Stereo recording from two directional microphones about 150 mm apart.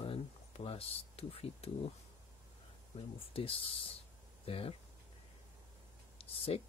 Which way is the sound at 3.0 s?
40° left (ahead or behind).